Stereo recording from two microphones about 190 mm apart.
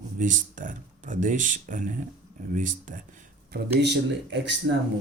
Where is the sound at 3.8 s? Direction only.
65° right (ahead or behind).